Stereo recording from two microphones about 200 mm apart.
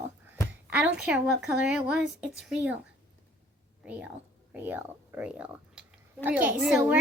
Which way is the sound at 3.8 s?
5° right (ahead or behind).